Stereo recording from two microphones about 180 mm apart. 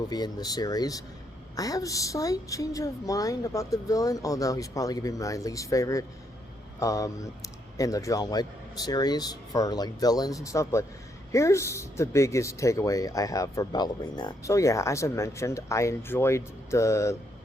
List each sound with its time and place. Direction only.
0.1 s a woman's voice: 20° left (ahead or behind)